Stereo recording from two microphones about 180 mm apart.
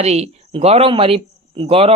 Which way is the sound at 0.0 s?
35° right (ahead or behind).